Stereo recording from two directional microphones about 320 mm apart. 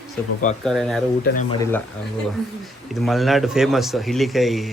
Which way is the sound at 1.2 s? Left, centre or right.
Left.